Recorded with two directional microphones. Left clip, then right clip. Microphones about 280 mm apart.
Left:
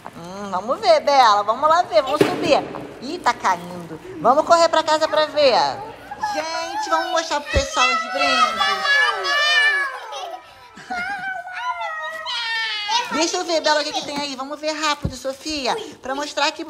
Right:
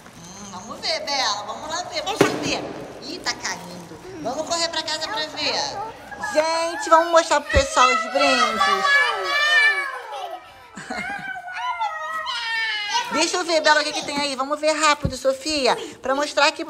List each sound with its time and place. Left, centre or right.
0.5 s speech: centre
10.9 s laughter: centre
12.3 s cat: centre
13.9 s speech: centre